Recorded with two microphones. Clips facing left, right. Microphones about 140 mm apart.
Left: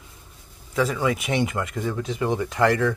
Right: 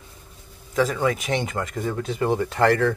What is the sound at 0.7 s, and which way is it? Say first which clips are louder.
Speech: right 1 dB; 35° right (ahead or behind).